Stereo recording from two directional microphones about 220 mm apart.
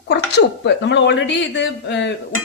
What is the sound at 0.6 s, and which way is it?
A man's voice, 55° left (ahead or behind).